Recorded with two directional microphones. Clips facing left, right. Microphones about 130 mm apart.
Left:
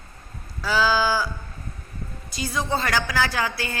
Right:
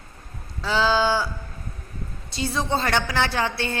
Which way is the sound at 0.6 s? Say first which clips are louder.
Right 1 dB; 25° right (ahead or behind).